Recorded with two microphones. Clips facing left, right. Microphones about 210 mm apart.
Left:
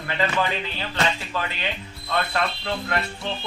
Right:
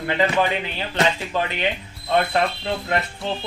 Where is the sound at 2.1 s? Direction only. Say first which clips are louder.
Right 5 dB; 20° right (ahead or behind).